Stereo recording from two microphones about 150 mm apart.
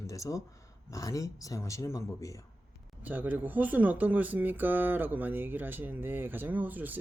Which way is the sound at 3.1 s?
10° right (ahead or behind).